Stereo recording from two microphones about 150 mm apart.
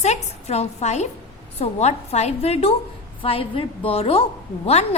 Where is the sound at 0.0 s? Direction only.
45° left (ahead or behind).